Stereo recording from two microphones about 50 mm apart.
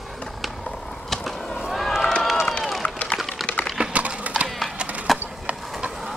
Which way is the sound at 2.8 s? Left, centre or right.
Left.